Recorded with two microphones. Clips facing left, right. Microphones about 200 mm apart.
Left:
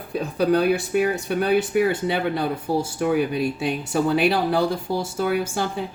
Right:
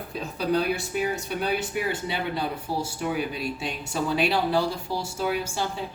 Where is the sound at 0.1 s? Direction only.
55° left (ahead or behind).